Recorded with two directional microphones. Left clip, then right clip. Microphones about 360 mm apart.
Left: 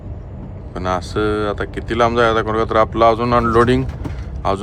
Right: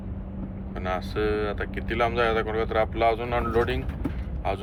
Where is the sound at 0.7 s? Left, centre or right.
Left.